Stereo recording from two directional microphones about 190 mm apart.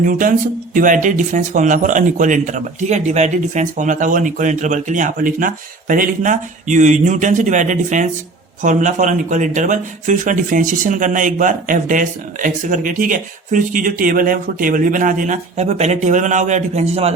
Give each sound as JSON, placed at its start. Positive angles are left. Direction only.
{"t": 0.0, "sound": "speech", "side_deg": -45}